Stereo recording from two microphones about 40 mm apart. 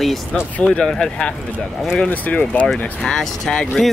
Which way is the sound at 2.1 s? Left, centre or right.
Left.